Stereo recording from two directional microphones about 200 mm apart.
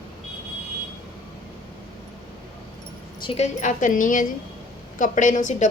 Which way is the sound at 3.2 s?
30° left (ahead or behind).